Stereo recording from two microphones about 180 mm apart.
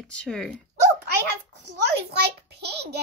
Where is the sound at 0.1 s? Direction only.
5° left (ahead or behind).